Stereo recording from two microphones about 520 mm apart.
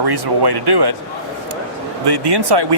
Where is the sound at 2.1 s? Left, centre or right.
Right.